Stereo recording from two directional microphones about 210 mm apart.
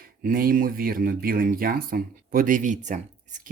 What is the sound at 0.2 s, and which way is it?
Speech, 45° right (ahead or behind).